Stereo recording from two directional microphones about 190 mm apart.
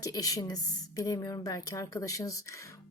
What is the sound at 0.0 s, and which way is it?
A woman's voice, 20° left (ahead or behind).